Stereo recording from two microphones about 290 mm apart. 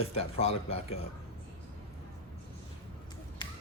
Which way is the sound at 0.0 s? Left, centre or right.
Left.